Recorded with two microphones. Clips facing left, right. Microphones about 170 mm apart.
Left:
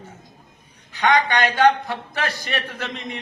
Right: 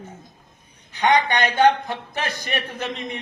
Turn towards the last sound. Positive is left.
turn(degrees=-20)  # may be behind; listen again after turning